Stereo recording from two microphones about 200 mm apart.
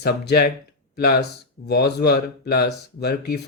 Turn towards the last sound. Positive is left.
turn(degrees=50)  # may be behind; listen again after turning